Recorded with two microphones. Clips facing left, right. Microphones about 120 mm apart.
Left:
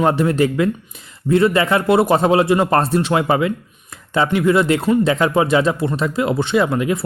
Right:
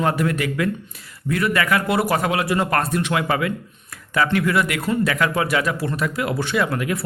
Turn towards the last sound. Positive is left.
turn(degrees=25)  # may be behind; listen again after turning